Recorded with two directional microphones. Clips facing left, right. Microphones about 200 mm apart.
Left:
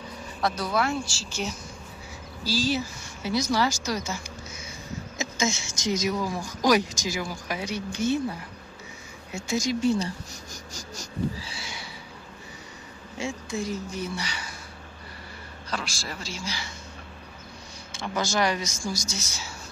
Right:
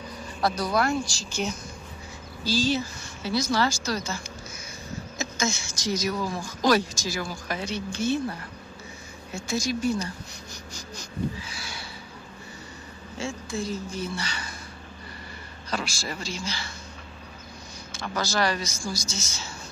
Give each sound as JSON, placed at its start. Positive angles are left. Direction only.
{"t": 0.4, "sound": "speech", "side_deg": 0}
{"t": 10.5, "sound": "a sound", "side_deg": 40}
{"t": 13.2, "sound": "speech", "side_deg": 15}
{"t": 15.7, "sound": "speech", "side_deg": 0}
{"t": 18.3, "sound": "speech", "side_deg": 20}